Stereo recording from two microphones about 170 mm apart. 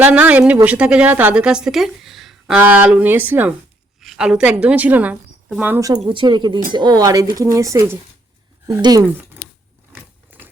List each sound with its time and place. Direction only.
0.0 s a woman's voice: 10° right (ahead or behind)
6.1 s speech: 25° right (ahead or behind)
10.3 s a sound: 10° right (ahead or behind)